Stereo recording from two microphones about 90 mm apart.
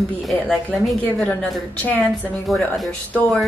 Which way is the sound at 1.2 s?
10° left (ahead or behind).